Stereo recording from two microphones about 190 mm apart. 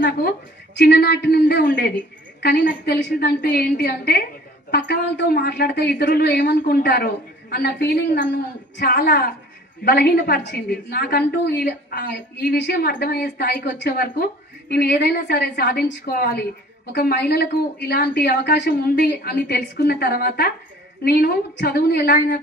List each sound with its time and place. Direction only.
0.7 s a woman's voice: 60° left (ahead or behind)